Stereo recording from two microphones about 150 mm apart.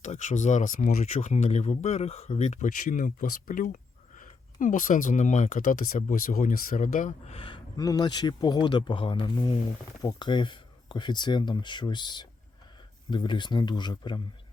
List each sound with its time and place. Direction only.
0.0 s speech: 55° left (ahead or behind)
2.8 s speech: 65° left (ahead or behind)
7.3 s speech: 35° left (ahead or behind)